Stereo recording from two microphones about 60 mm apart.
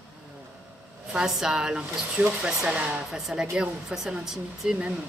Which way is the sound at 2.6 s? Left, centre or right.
Centre.